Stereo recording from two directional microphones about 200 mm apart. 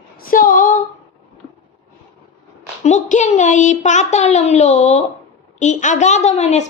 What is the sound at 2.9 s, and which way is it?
A woman's voice, 35° left (ahead or behind).